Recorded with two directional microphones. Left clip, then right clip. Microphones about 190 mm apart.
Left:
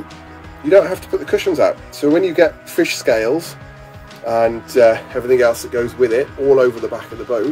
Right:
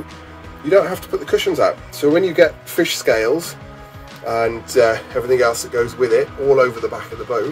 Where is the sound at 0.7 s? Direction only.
15° left (ahead or behind).